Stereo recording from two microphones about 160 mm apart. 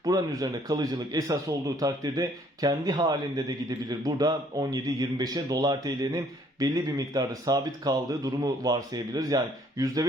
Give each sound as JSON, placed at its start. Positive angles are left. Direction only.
{"t": 0.0, "sound": "speech", "side_deg": -20}